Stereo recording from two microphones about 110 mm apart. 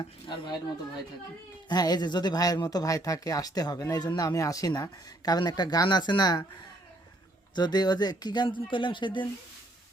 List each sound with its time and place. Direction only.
0.0 s speech: 40° left (ahead or behind)
1.7 s speech: 35° left (ahead or behind)
7.5 s speech: 40° left (ahead or behind)